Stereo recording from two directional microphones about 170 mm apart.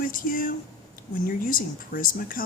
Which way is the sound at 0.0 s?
55° left (ahead or behind).